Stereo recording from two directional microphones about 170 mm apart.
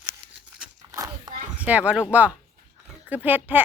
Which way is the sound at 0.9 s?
20° right (ahead or behind).